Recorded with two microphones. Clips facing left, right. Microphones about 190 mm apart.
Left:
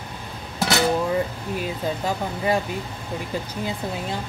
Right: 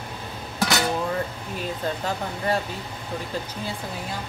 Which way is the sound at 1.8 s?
10° left (ahead or behind).